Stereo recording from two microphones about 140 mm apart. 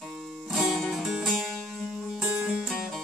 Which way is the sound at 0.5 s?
Centre (ahead or behind).